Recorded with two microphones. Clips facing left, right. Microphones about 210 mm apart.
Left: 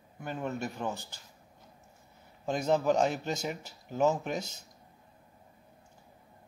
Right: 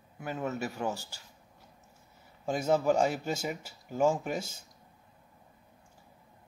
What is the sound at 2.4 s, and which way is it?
A man's voice, 5° right (ahead or behind).